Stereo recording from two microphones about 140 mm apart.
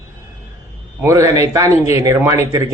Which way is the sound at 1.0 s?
20° right (ahead or behind).